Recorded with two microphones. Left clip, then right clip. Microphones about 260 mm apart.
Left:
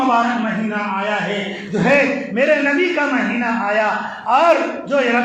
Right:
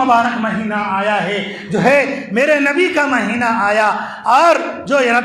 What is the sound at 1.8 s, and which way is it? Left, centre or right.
A man's voice, right.